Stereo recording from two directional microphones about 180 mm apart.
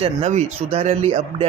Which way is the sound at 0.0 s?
40° right (ahead or behind).